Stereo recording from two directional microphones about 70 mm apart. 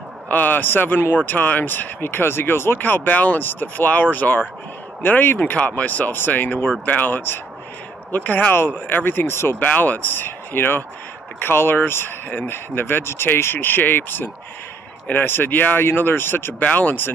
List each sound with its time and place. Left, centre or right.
0.3 s speech: left
9.6 s speech: left